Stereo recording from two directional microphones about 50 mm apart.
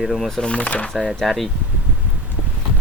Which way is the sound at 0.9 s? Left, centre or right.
Centre.